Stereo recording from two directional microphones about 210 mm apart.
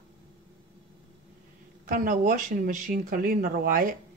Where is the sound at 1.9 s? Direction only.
40° right (ahead or behind).